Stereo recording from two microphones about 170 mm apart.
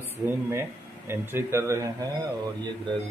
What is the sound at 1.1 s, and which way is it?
Speech, 15° right (ahead or behind).